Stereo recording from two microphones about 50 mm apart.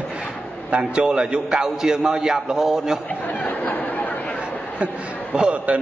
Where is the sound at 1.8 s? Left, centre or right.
Centre.